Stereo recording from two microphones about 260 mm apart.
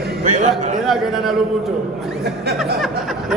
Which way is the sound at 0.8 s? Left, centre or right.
Centre.